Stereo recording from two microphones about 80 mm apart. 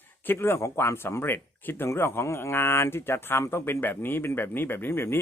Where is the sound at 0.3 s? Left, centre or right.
Left.